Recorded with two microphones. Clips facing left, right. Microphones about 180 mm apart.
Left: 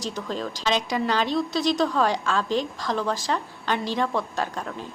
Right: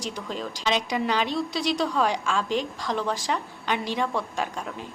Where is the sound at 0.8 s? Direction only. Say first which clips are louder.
Left 1 dB; 15° right (ahead or behind).